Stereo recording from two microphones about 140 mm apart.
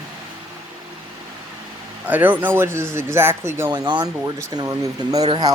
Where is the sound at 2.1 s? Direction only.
10° right (ahead or behind).